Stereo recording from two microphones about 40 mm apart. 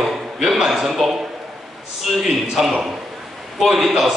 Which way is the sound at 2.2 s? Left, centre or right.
Centre.